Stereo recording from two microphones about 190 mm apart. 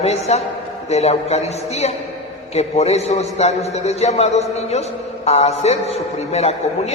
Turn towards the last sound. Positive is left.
turn(degrees=35)  # may be behind; listen again after turning